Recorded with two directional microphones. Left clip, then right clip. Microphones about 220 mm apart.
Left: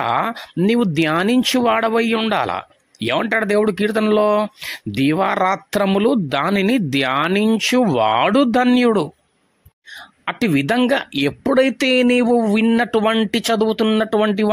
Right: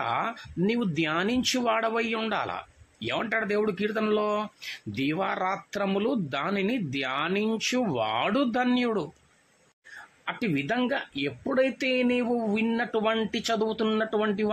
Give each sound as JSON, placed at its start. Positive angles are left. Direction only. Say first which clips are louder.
{"t": 0.0, "sound": "speech", "louder": "left 9 dB", "side_deg": 45}
{"t": 10.2, "sound": "speech", "louder": "left 11 dB", "side_deg": 45}